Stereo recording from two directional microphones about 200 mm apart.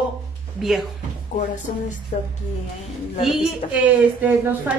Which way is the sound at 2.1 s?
45° left (ahead or behind).